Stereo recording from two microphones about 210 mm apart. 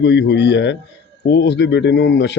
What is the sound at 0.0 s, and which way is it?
Speech, 55° left (ahead or behind).